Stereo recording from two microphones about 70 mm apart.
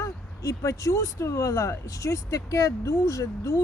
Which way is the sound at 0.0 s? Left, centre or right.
Left.